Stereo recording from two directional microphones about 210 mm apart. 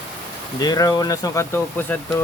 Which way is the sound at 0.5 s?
15° left (ahead or behind).